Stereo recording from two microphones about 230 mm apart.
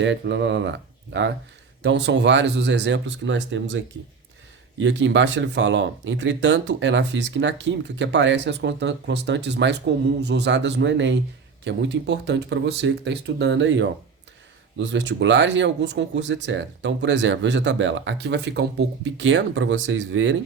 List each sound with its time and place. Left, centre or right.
0.0 s speech: right